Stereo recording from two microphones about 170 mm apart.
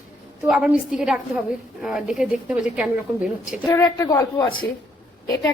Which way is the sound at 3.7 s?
20° left (ahead or behind).